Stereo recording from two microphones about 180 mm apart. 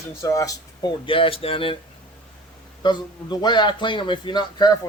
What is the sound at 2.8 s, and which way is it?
Speech, 25° left (ahead or behind).